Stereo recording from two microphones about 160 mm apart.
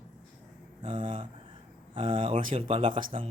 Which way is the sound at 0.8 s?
30° right (ahead or behind).